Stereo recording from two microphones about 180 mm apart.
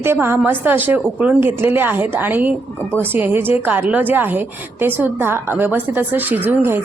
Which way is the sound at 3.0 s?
10° right (ahead or behind).